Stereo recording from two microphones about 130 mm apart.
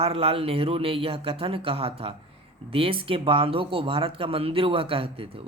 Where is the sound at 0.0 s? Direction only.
50° right (ahead or behind).